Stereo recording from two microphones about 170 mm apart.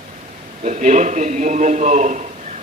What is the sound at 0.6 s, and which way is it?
A man's voice, 45° right (ahead or behind).